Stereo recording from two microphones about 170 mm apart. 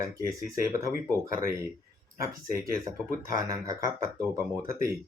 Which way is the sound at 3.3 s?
20° right (ahead or behind).